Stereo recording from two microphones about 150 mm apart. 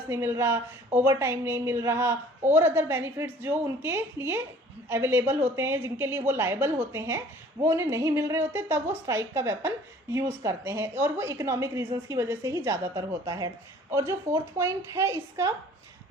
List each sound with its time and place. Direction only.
0.1 s a woman's voice: 15° right (ahead or behind)